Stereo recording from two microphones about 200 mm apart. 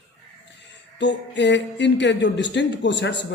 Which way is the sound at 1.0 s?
65° left (ahead or behind).